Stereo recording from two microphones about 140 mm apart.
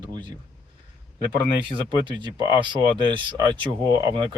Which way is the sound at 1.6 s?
35° right (ahead or behind).